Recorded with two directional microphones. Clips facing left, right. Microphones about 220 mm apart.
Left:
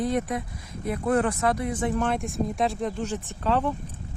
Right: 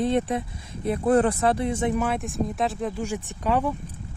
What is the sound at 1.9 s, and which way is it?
Speech, 5° right (ahead or behind).